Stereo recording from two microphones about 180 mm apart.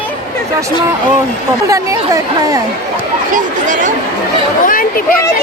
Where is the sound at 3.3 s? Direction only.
45° right (ahead or behind).